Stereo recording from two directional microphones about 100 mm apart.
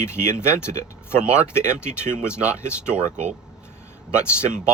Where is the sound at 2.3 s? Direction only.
10° right (ahead or behind).